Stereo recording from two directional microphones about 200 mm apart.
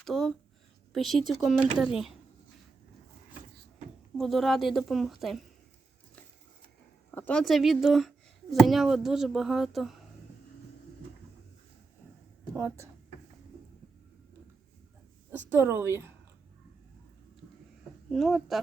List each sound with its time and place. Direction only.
0.0 s speech: centre (ahead or behind)
4.2 s speech: centre (ahead or behind)
7.1 s speech: 10° left (ahead or behind)
12.5 s a woman's voice: 15° right (ahead or behind)
15.3 s a woman's voice: 10° right (ahead or behind)
18.1 s speech: centre (ahead or behind)